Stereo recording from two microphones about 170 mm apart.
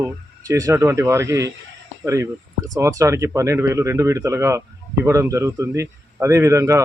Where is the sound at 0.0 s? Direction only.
20° right (ahead or behind).